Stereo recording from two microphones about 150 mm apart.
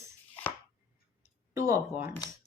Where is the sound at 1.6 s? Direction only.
20° right (ahead or behind).